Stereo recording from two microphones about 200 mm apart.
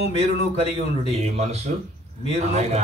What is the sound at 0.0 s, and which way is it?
Speech, 30° left (ahead or behind).